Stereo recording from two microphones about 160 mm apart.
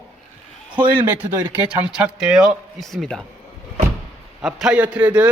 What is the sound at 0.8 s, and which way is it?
Speech, 30° right (ahead or behind).